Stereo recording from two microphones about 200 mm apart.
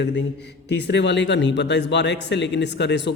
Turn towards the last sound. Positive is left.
turn(degrees=60)  # may be behind; listen again after turning